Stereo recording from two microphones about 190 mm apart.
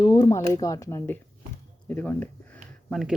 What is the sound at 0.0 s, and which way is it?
Speech, 20° left (ahead or behind).